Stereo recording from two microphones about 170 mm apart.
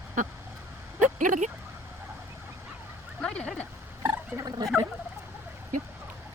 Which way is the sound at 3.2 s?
5° left (ahead or behind).